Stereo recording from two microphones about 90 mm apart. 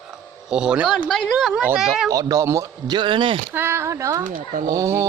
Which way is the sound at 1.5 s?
15° right (ahead or behind).